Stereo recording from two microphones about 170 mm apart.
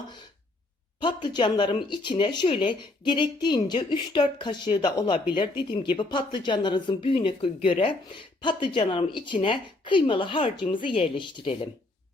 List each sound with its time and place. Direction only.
1.0 s speech: 25° left (ahead or behind)